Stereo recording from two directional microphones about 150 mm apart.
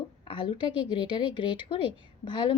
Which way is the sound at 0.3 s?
30° left (ahead or behind).